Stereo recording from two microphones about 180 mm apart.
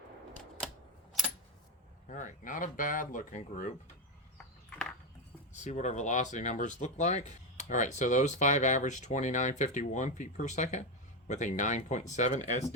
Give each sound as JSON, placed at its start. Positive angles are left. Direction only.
{"t": 2.0, "sound": "speech", "side_deg": 45}
{"t": 5.6, "sound": "speech", "side_deg": 40}